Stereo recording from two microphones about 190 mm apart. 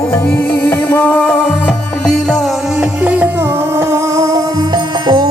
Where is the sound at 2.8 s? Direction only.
5° right (ahead or behind).